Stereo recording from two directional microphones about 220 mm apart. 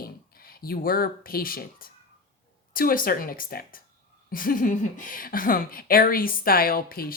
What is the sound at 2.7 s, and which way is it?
A woman's voice, 40° left (ahead or behind).